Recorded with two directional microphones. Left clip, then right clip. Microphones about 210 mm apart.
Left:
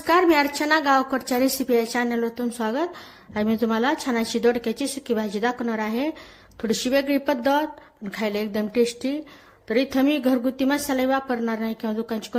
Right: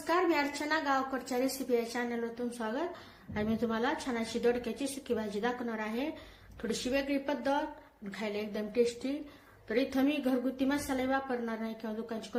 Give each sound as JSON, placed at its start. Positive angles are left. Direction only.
{"t": 0.0, "sound": "a woman's voice", "side_deg": 45}